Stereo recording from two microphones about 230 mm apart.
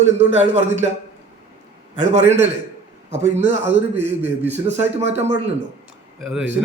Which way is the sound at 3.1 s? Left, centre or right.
Right.